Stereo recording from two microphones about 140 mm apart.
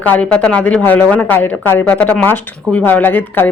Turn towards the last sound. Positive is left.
turn(degrees=15)  # may be behind; listen again after turning